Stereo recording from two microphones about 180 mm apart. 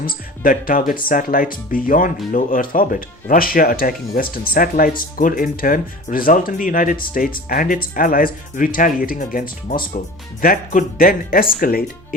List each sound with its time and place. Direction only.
0.0 s speech: 50° left (ahead or behind)